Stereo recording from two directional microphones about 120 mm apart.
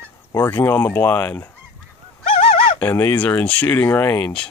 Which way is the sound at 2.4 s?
50° left (ahead or behind).